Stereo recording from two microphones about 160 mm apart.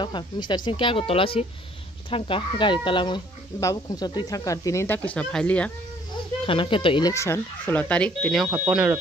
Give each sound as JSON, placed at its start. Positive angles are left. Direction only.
{"t": 0.0, "sound": "speech", "side_deg": 30}
{"t": 6.4, "sound": "speech", "side_deg": 35}
{"t": 8.5, "sound": "speech", "side_deg": -10}